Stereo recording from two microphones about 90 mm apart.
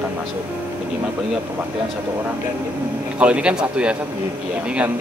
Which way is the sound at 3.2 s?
10° right (ahead or behind).